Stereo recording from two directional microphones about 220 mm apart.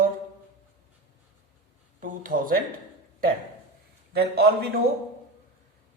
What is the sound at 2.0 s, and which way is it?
Speech, 40° right (ahead or behind).